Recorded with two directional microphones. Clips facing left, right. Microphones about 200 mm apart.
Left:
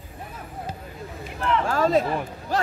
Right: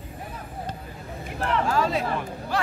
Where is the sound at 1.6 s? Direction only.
50° left (ahead or behind).